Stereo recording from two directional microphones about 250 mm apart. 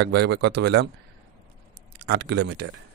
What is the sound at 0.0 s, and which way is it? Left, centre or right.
Speech, right.